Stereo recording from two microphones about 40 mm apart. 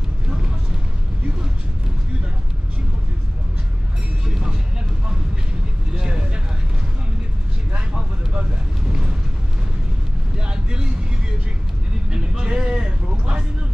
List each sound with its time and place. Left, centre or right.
5.9 s vehicle: centre
7.9 s vehicle: centre
10.4 s vehicle: right
12.1 s a sound: centre